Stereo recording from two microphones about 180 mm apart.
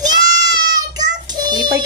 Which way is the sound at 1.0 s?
25° right (ahead or behind).